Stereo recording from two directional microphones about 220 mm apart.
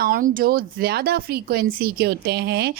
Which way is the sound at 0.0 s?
40° right (ahead or behind).